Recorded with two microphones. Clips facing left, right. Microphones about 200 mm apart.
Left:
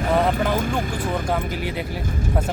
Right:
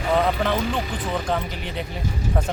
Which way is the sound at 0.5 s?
50° left (ahead or behind).